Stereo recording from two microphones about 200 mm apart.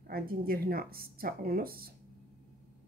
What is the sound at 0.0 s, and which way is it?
A woman's voice, 50° right (ahead or behind).